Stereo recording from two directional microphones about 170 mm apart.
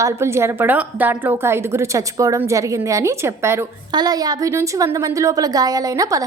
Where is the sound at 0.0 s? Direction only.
15° right (ahead or behind).